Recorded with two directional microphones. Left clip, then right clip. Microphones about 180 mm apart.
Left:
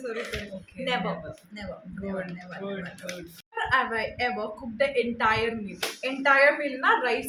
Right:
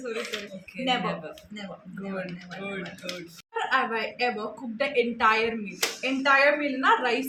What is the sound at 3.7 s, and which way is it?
A woman's voice, 10° left (ahead or behind).